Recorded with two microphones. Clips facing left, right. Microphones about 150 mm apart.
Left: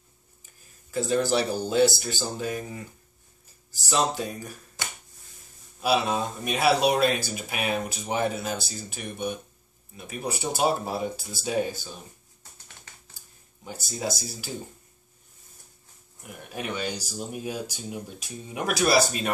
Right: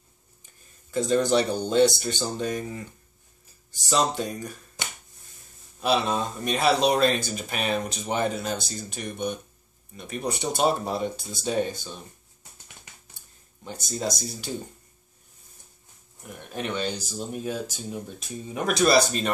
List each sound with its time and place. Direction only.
0.9 s speech: 5° left (ahead or behind)
5.8 s speech: 5° left (ahead or behind)
13.7 s speech: 5° left (ahead or behind)
16.2 s speech: 5° left (ahead or behind)